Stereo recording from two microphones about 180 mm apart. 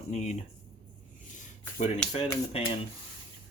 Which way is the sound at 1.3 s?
45° left (ahead or behind).